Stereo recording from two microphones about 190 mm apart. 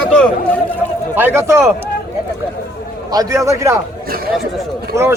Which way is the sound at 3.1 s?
20° right (ahead or behind).